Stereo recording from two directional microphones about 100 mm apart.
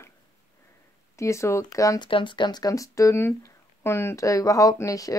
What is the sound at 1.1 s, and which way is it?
Speech, 30° left (ahead or behind).